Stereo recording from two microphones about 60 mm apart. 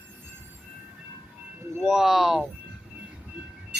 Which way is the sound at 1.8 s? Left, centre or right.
Centre.